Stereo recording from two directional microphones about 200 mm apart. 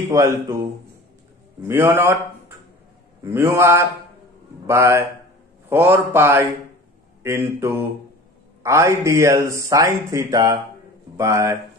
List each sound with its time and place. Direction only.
0.1 s speech: 15° right (ahead or behind)
1.7 s speech: 10° right (ahead or behind)
3.2 s speech: 10° right (ahead or behind)